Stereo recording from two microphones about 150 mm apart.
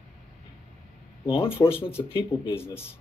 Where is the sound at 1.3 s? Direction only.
35° left (ahead or behind).